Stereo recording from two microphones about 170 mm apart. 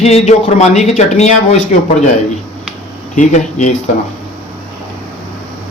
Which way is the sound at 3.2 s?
45° left (ahead or behind).